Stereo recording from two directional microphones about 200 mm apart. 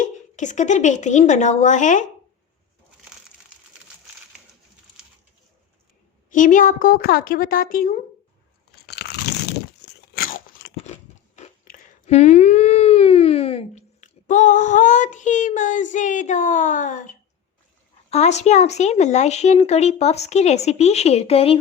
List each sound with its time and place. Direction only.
0.0 s a woman's voice: 40° left (ahead or behind)
6.3 s a woman's voice: 40° left (ahead or behind)
8.9 s crunch: 55° left (ahead or behind)
11.3 s a sound: 35° left (ahead or behind)
18.1 s speech: 35° left (ahead or behind)